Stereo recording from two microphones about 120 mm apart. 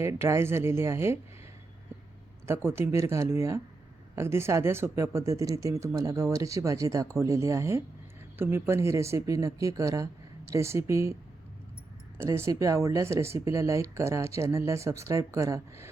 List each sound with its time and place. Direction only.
0.0 s speech: 25° right (ahead or behind)
2.6 s speech: 20° right (ahead or behind)